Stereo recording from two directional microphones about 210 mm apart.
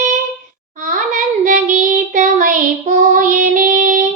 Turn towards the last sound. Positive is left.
turn(degrees=-40)  # may be behind; listen again after turning